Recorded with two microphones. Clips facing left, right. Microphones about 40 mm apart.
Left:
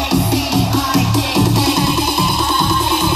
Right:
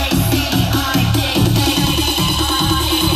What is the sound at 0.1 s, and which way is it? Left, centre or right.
Music, right.